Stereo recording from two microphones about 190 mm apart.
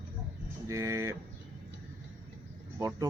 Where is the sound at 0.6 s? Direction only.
15° right (ahead or behind).